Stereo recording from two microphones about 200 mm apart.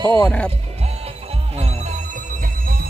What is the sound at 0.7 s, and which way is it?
Music, 30° right (ahead or behind).